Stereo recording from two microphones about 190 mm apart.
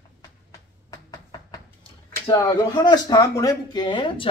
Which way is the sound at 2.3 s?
20° left (ahead or behind).